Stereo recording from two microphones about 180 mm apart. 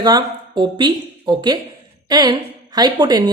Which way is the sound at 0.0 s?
25° right (ahead or behind).